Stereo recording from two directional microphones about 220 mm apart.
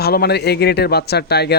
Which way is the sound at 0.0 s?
45° left (ahead or behind).